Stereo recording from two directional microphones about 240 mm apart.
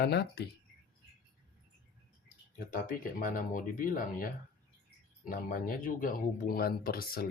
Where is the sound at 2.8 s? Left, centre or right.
Left.